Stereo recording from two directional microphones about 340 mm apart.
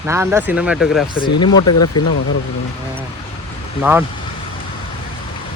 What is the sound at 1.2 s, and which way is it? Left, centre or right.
Speech, centre.